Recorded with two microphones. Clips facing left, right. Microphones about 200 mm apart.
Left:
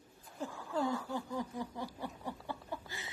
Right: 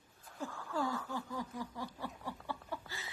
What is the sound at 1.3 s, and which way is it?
Snicker, 20° left (ahead or behind).